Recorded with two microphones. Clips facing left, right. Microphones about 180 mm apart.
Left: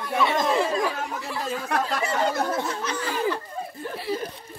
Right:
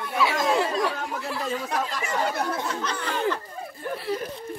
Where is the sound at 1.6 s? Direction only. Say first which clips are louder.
Left 2 dB; 60° left (ahead or behind).